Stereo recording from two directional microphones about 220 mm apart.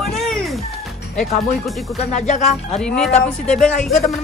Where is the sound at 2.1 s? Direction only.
30° left (ahead or behind).